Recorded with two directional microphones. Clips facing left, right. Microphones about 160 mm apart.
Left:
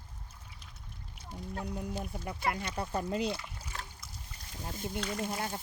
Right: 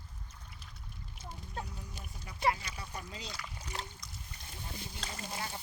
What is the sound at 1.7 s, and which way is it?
Speech, 60° left (ahead or behind).